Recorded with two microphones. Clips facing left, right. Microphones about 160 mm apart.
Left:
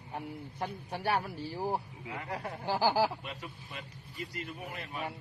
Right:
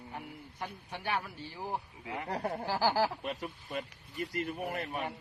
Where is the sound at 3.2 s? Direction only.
40° right (ahead or behind).